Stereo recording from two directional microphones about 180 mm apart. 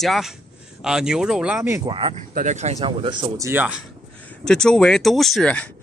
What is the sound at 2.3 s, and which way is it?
Speech, 45° right (ahead or behind).